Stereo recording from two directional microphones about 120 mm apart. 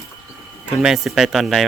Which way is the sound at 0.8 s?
5° right (ahead or behind).